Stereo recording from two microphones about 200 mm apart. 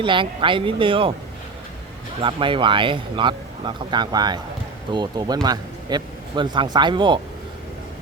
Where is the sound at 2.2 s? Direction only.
25° right (ahead or behind).